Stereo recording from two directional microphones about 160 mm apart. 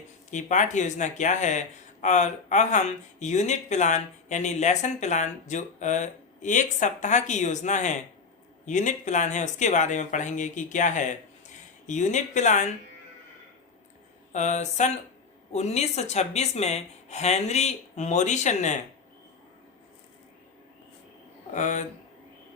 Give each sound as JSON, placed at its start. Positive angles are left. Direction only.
{"t": 0.3, "sound": "speech", "side_deg": 50}
{"t": 14.3, "sound": "speech", "side_deg": 50}
{"t": 21.5, "sound": "speech", "side_deg": 50}